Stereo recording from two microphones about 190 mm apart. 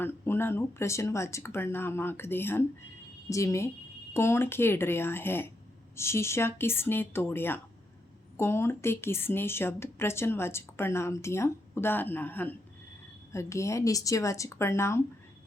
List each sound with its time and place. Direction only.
0.0 s speech: 10° left (ahead or behind)